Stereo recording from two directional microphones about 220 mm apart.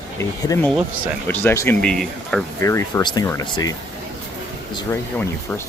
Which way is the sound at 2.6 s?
15° left (ahead or behind).